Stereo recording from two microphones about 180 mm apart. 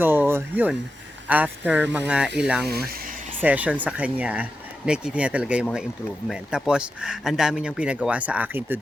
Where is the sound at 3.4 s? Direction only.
10° right (ahead or behind).